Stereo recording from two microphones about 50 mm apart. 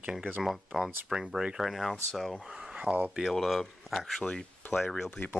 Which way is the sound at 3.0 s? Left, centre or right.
Centre.